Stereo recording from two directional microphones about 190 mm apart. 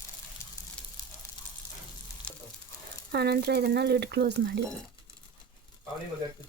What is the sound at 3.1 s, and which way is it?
Speech, 60° right (ahead or behind).